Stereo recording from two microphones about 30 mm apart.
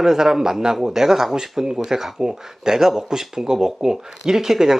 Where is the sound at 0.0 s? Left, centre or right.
Centre.